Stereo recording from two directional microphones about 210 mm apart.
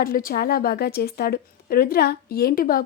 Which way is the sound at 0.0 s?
40° left (ahead or behind).